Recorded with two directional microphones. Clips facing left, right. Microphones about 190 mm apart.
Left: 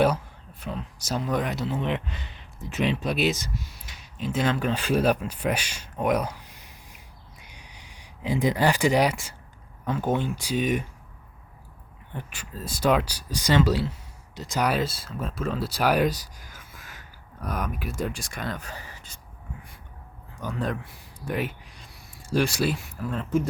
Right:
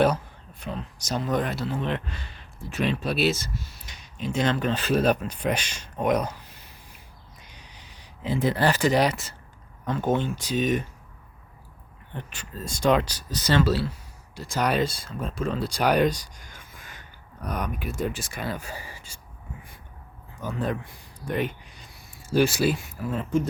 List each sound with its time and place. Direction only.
0.6 s speech: 5° left (ahead or behind)
7.4 s a sound: 10° left (ahead or behind)
9.8 s speech: 10° left (ahead or behind)
12.1 s speech: 10° left (ahead or behind)
14.6 s speech: 5° left (ahead or behind)
20.3 s speech: centre (ahead or behind)